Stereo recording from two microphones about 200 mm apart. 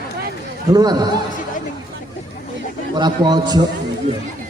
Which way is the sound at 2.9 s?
20° right (ahead or behind).